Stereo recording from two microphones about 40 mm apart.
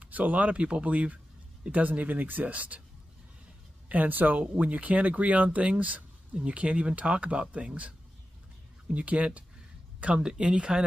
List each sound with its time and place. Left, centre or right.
0.0 s speech: right
3.9 s speech: right
8.9 s speech: right